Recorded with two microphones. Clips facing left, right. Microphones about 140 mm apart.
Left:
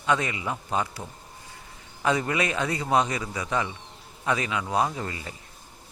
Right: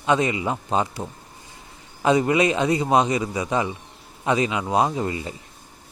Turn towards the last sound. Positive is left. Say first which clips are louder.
# right 7 dB
turn(degrees=-20)  # may be behind; listen again after turning